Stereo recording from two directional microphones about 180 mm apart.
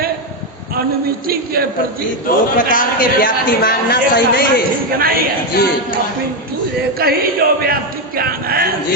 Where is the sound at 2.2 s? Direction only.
50° left (ahead or behind).